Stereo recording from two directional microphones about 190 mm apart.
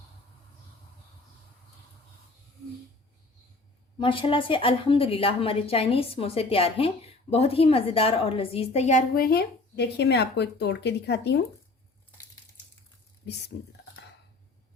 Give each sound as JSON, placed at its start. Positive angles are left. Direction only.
{"t": 3.9, "sound": "speech", "side_deg": 25}